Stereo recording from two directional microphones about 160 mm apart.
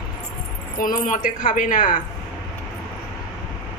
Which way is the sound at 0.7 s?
60° left (ahead or behind).